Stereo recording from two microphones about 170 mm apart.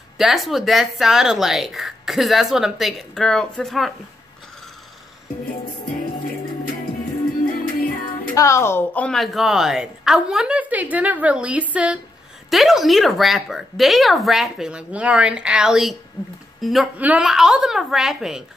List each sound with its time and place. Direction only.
0.2 s speech: centre (ahead or behind)
7.6 s music: 55° left (ahead or behind)
8.4 s speech: 15° left (ahead or behind); by 18.4 s centre (ahead or behind)